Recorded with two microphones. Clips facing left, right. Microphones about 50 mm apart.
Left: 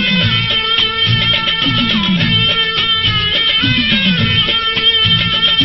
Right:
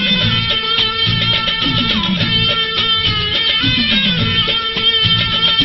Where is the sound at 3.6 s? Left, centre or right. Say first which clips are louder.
Left 2 dB; left.